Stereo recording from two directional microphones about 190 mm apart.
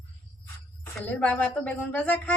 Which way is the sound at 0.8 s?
10° left (ahead or behind).